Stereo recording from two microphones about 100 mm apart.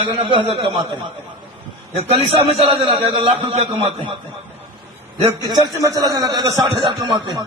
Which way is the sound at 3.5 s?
85° right.